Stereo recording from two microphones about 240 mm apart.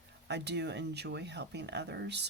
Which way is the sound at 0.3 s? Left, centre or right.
Right.